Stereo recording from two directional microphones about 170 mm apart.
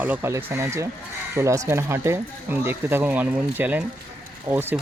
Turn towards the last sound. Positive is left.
turn(degrees=-15)  # may be behind; listen again after turning